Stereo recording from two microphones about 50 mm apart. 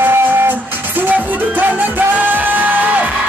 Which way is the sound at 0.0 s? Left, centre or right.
Right.